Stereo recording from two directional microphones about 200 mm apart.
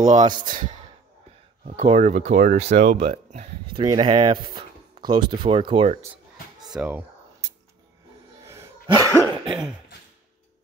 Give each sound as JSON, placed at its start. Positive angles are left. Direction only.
{"t": 0.0, "sound": "speech", "side_deg": -35}
{"t": 0.3, "sound": "speech", "side_deg": -20}
{"t": 1.8, "sound": "speech", "side_deg": -30}
{"t": 6.7, "sound": "speech", "side_deg": -5}
{"t": 8.5, "sound": "a sound", "side_deg": -15}
{"t": 9.0, "sound": "cough", "side_deg": 15}
{"t": 9.4, "sound": "cough", "side_deg": -5}